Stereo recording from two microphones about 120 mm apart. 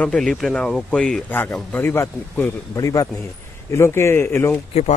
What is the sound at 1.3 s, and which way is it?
Speech, 15° left (ahead or behind).